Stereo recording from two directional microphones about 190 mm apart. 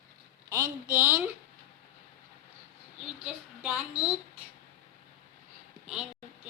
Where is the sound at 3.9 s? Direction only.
30° right (ahead or behind).